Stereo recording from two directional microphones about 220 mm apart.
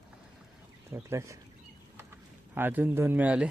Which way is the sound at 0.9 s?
10° right (ahead or behind).